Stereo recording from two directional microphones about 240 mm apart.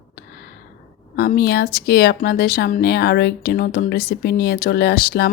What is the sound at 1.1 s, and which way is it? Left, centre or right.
Speech, left.